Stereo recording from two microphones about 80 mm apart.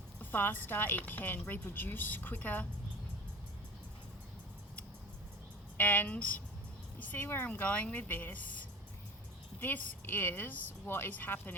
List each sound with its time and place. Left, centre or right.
0.2 s a woman's voice: left
5.7 s a woman's voice: left
9.6 s a woman's voice: left